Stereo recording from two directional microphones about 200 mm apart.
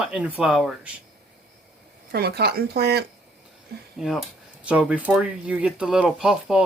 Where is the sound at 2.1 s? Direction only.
55° right (ahead or behind).